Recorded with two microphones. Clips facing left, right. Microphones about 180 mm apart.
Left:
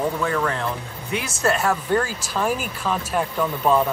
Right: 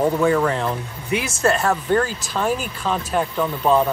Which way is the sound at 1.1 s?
5° left (ahead or behind).